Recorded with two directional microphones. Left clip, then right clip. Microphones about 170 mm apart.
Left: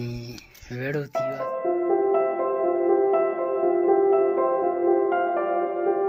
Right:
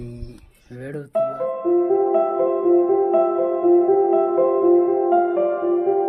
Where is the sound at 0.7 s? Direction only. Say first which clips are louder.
Right 2 dB; 15° left (ahead or behind).